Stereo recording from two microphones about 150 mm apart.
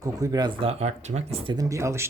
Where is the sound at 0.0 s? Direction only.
25° right (ahead or behind).